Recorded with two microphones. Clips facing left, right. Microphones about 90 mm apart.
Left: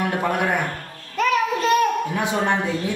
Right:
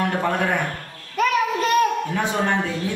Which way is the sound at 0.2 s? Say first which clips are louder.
Even; 10° left (ahead or behind).